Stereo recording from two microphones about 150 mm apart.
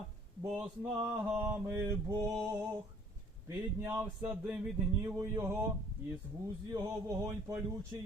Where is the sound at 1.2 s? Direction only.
15° right (ahead or behind).